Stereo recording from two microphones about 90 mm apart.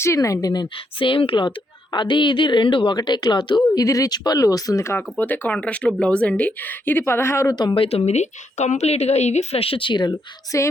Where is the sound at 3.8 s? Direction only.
40° left (ahead or behind).